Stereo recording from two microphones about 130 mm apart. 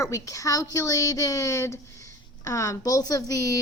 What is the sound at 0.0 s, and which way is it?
A woman's voice, 25° left (ahead or behind).